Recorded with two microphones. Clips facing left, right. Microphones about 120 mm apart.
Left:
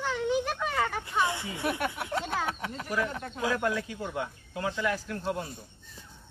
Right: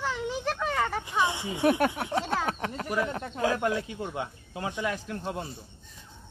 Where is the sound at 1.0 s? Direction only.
15° right (ahead or behind).